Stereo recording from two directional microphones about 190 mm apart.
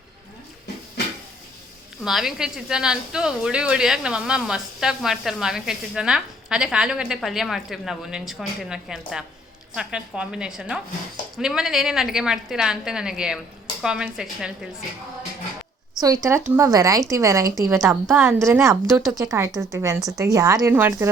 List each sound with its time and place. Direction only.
2.0 s a woman's voice: centre (ahead or behind)
16.0 s speech: 20° right (ahead or behind)
17.7 s a woman's voice: centre (ahead or behind)
18.3 s speech: 15° right (ahead or behind)